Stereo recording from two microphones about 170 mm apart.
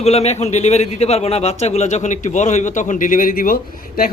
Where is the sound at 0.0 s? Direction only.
40° left (ahead or behind).